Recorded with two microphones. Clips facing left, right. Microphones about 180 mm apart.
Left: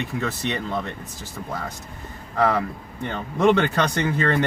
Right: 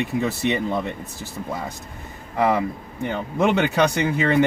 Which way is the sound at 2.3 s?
15° right (ahead or behind).